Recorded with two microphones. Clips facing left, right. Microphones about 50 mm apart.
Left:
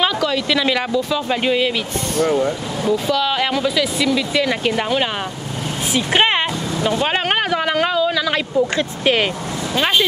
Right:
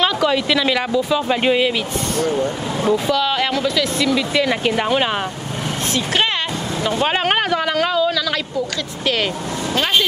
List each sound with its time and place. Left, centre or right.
0.5 s speech: centre
1.1 s speech: centre
3.1 s speech: centre
4.1 s speech: centre
5.9 s speech: left
7.0 s a sound: centre
8.3 s speech: left